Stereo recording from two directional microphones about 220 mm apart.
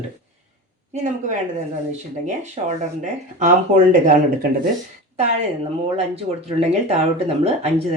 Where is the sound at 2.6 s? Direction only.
25° right (ahead or behind).